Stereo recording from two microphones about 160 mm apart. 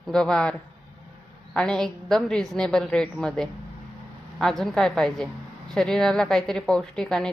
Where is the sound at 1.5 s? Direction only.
5° left (ahead or behind).